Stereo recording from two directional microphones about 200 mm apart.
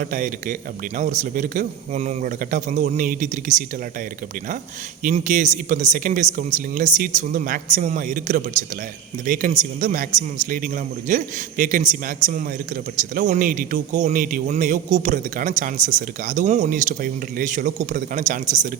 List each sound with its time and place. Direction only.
0.0 s a man's voice: 40° right (ahead or behind)
5.0 s a man's voice: 40° right (ahead or behind)